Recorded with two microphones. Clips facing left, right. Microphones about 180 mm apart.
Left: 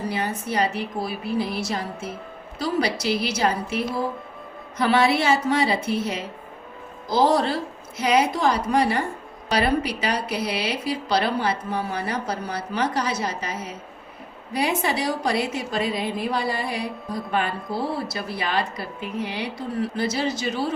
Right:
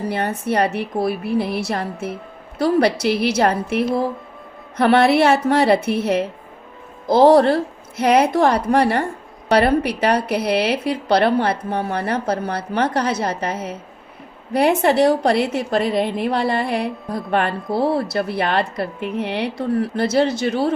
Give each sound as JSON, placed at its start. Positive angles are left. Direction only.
{"t": 0.1, "sound": "a woman's voice", "side_deg": -60}